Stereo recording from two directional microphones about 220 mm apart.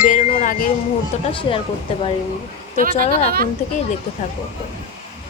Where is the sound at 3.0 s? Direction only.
30° left (ahead or behind).